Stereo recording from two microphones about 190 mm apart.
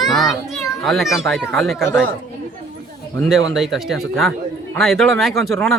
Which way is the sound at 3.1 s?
Centre (ahead or behind).